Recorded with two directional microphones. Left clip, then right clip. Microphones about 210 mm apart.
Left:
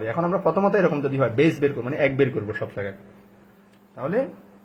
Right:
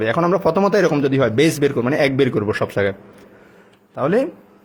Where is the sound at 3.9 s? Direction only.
50° right (ahead or behind).